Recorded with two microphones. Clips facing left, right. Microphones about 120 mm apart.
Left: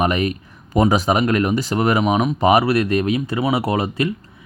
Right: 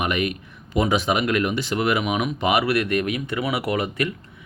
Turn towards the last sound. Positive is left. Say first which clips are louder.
# left 4 dB
turn(degrees=30)  # may be behind; listen again after turning